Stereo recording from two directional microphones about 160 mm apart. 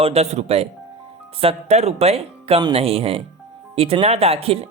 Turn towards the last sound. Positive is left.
turn(degrees=-35)  # may be behind; listen again after turning